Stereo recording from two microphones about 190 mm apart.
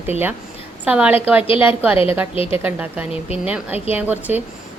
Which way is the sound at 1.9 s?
30° left (ahead or behind).